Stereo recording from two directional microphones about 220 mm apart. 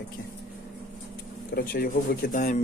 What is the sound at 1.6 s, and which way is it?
Speech, 45° left (ahead or behind).